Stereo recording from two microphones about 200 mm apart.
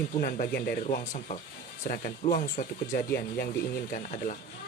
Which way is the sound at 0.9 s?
40° left (ahead or behind).